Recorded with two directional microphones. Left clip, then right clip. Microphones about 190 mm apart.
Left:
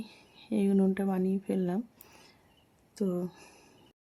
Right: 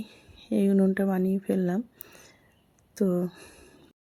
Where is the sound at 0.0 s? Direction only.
10° right (ahead or behind).